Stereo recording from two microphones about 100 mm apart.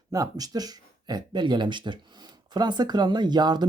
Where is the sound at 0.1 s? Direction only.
40° right (ahead or behind).